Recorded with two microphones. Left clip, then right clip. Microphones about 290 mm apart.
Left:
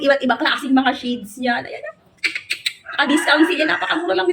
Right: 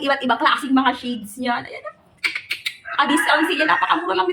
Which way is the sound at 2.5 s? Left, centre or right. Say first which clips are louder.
Left 2 dB; centre.